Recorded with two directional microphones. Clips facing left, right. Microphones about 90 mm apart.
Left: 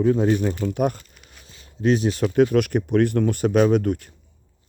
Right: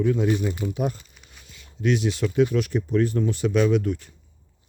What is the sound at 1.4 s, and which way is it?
Speech, 35° left (ahead or behind).